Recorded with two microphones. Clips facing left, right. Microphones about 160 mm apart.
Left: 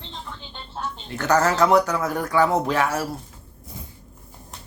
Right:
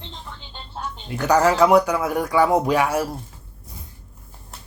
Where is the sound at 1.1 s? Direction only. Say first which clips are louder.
Right 3 dB; 10° right (ahead or behind).